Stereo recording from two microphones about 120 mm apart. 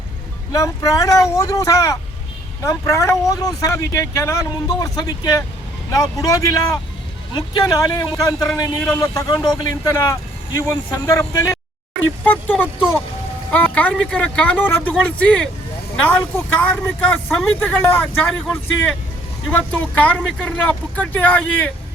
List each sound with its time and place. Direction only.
0.5 s speech: 30° left (ahead or behind)
12.2 s vehicle: 15° left (ahead or behind)
13.5 s speech: 15° left (ahead or behind)